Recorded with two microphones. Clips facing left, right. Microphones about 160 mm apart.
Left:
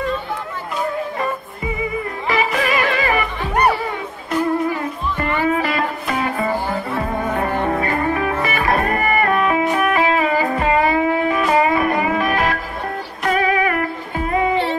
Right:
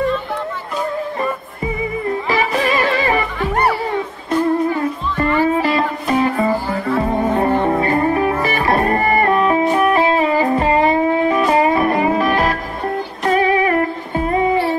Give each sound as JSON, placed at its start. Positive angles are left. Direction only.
{"t": 2.2, "sound": "music", "side_deg": -30}
{"t": 5.4, "sound": "music", "side_deg": -30}
{"t": 7.8, "sound": "music", "side_deg": -30}